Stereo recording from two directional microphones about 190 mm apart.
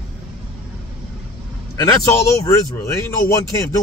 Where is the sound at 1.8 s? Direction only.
15° left (ahead or behind).